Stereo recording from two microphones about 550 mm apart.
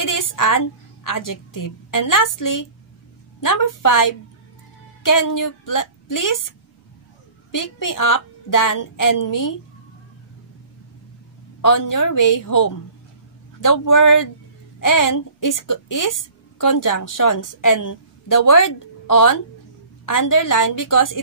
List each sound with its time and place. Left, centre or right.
0.0 s a woman's voice: left
7.5 s a woman's voice: left
11.6 s a woman's voice: left